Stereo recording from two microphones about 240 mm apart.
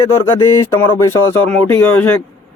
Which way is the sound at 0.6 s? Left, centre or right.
Centre.